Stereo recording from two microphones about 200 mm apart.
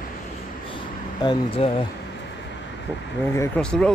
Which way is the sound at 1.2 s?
20° left (ahead or behind).